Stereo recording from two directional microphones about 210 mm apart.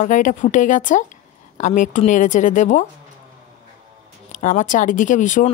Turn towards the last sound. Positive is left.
turn(degrees=35)  # may be behind; listen again after turning